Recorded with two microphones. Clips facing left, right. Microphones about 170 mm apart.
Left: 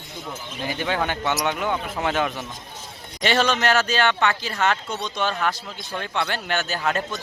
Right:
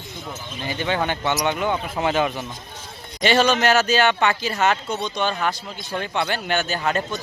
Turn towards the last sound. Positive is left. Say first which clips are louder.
# right 2 dB
turn(degrees=0)  # may be behind; listen again after turning